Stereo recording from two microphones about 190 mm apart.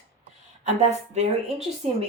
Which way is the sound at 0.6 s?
35° right (ahead or behind).